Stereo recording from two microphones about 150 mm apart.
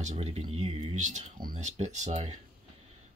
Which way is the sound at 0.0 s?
50° right (ahead or behind).